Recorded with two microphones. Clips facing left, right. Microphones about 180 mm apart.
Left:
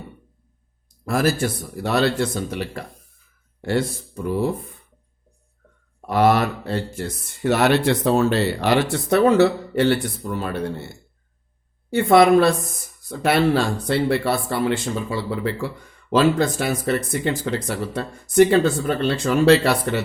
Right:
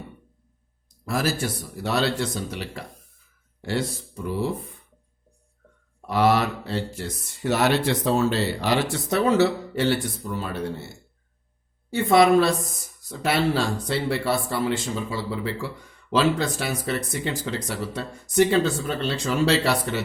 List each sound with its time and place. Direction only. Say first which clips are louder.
1.0 s speech: left 5 dB; 55° left (ahead or behind)
6.1 s speech: left 3 dB; 50° left (ahead or behind)
11.9 s speech: left 3 dB; 60° left (ahead or behind)